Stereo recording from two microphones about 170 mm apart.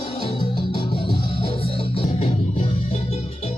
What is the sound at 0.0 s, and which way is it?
Music, 30° left (ahead or behind).